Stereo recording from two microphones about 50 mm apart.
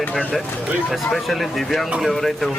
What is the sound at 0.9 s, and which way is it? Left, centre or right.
Speech, centre.